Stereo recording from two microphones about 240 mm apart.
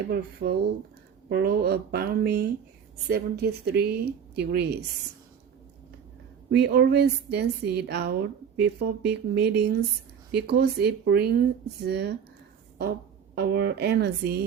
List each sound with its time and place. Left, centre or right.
0.0 s a woman's voice: right
6.5 s a woman's voice: right
13.3 s speech: right